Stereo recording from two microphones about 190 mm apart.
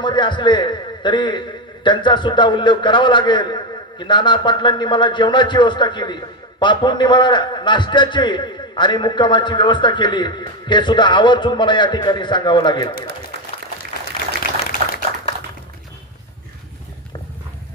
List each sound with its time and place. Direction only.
0.0 s a man's voice: 25° left (ahead or behind)